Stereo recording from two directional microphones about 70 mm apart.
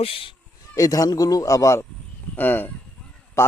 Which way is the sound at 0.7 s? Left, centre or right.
Left.